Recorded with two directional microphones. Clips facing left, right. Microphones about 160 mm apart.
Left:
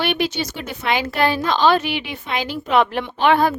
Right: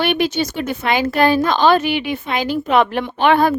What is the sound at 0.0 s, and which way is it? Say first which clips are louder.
A woman's voice: right 4 dB; 50° right (ahead or behind).